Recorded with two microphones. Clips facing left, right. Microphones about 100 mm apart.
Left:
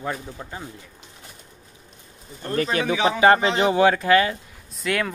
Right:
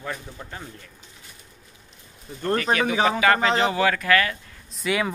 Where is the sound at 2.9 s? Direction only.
45° right (ahead or behind).